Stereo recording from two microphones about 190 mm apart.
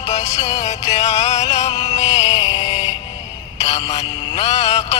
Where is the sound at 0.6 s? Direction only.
35° left (ahead or behind).